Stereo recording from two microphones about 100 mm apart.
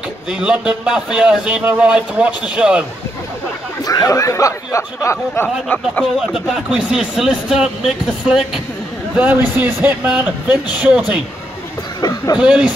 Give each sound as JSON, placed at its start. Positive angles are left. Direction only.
{"t": 0.3, "sound": "speech", "side_deg": -10}
{"t": 3.8, "sound": "speech", "side_deg": 35}
{"t": 6.1, "sound": "speech", "side_deg": -5}
{"t": 9.2, "sound": "speech", "side_deg": -20}
{"t": 12.0, "sound": "speech", "side_deg": 40}
{"t": 12.4, "sound": "speech", "side_deg": -10}